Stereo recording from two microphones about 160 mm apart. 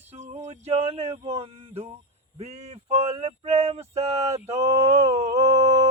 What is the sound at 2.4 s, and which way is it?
Male singing, 40° right (ahead or behind).